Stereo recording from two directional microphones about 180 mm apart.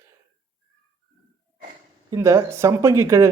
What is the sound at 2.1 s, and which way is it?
Speech, 15° right (ahead or behind).